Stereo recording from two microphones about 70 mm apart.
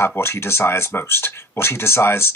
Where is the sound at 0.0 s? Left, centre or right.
Left.